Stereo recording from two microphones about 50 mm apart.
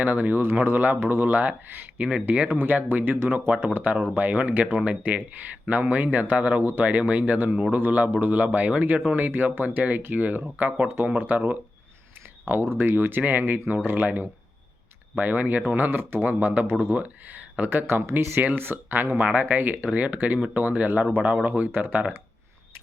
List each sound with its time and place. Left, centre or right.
0.0 s speech: right
2.6 s speech: right
12.5 s speech: right
17.0 s speech: right
19.2 s speech: right
19.7 s speech: right